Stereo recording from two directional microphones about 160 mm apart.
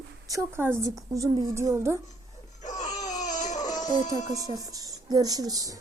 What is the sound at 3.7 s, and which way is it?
Music, 25° left (ahead or behind).